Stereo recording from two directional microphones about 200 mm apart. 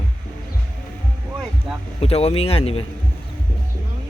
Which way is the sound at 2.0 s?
30° left (ahead or behind).